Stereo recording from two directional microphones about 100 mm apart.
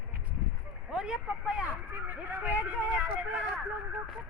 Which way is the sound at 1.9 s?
20° right (ahead or behind).